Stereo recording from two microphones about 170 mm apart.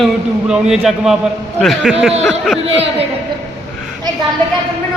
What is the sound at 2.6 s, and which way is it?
Speech, 35° right (ahead or behind).